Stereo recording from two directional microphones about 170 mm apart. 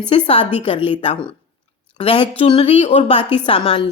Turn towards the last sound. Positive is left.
turn(degrees=30)  # may be behind; listen again after turning